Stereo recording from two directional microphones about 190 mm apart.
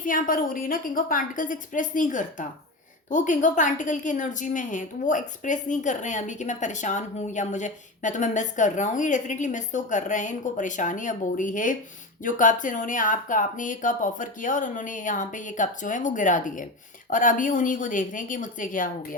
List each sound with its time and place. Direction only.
0.0 s a woman's voice: 45° left (ahead or behind)